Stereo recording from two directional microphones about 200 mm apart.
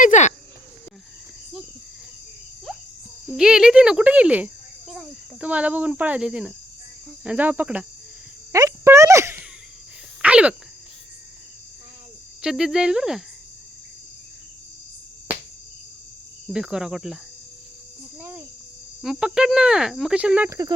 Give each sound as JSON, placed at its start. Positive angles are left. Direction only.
{"t": 0.0, "sound": "speech", "side_deg": 35}
{"t": 2.7, "sound": "music", "side_deg": 0}
{"t": 3.2, "sound": "speech", "side_deg": -5}
{"t": 7.3, "sound": "cricket", "side_deg": -10}
{"t": 8.5, "sound": "a sound", "side_deg": -15}
{"t": 12.4, "sound": "cricket", "side_deg": -5}
{"t": 16.5, "sound": "cricket", "side_deg": -5}
{"t": 19.0, "sound": "cricket", "side_deg": -5}